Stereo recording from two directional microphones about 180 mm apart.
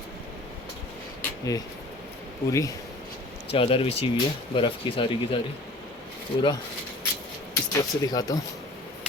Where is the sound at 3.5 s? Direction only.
30° left (ahead or behind).